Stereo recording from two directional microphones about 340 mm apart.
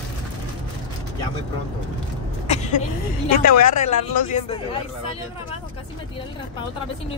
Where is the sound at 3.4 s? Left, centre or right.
Left.